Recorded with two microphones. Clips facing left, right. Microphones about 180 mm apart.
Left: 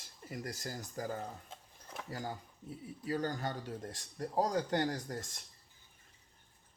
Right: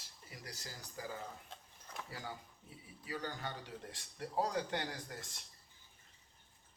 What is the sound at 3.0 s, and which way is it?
Speech, 45° left (ahead or behind).